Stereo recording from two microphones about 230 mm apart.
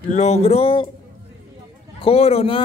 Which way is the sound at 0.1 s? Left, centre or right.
Left.